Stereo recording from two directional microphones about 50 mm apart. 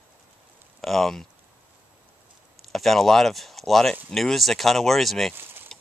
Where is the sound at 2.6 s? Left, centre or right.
Centre.